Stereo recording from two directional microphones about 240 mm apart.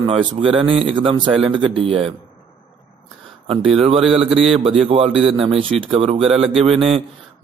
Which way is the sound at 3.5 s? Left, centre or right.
Right.